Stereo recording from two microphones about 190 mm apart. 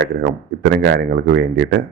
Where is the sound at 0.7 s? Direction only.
55° right (ahead or behind).